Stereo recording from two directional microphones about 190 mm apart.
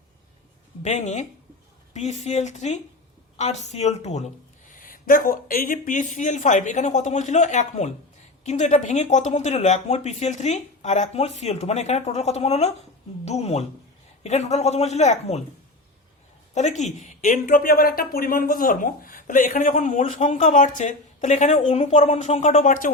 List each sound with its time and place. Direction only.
0.8 s speech: 35° left (ahead or behind)
4.7 s speech: 45° left (ahead or behind)
16.6 s speech: 35° left (ahead or behind)